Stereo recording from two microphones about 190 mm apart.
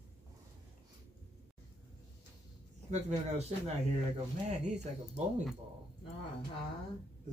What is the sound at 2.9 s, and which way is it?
Speech, 35° right (ahead or behind).